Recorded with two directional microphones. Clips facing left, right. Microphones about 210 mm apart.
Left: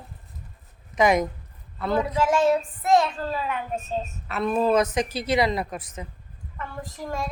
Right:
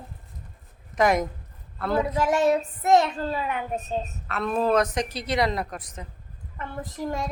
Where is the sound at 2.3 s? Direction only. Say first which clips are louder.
Left 1 dB; 20° right (ahead or behind).